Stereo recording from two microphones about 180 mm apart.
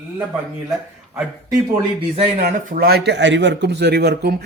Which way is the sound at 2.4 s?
55° right (ahead or behind).